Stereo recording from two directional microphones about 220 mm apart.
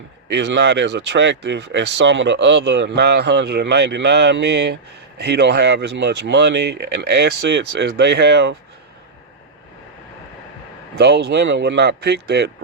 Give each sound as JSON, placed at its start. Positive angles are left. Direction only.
{"t": 0.3, "sound": "speech", "side_deg": -55}
{"t": 10.9, "sound": "speech", "side_deg": -50}